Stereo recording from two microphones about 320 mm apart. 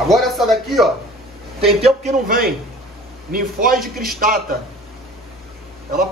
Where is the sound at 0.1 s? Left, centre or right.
Centre.